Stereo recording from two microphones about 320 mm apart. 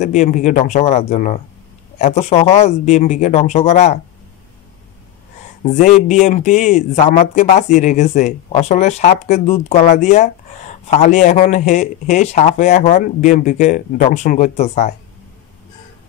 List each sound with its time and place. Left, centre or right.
0.0 s speech: left
5.6 s speech: left